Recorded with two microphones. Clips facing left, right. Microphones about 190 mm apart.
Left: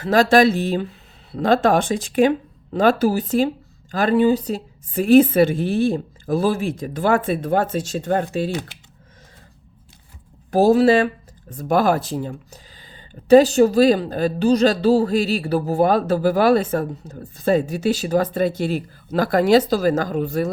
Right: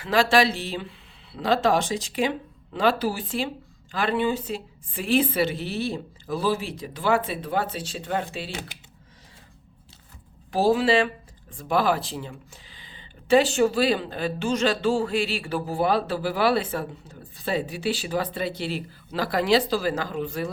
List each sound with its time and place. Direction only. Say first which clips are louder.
0.0 s speech: left 6 dB; 45° left (ahead or behind)
10.5 s speech: left 6 dB; 45° left (ahead or behind)